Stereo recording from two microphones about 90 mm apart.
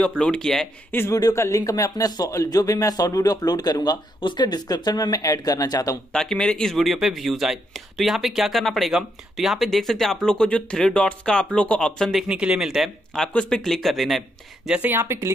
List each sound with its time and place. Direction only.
0.2 s speech: 10° left (ahead or behind)
1.1 s speech: 35° left (ahead or behind)
4.2 s speech: 60° left (ahead or behind); by 5.9 s 45° left (ahead or behind)
6.1 s speech: 5° left (ahead or behind)
12.3 s speech: 10° right (ahead or behind)
13.3 s speech: 10° left (ahead or behind)
14.7 s speech: 20° right (ahead or behind)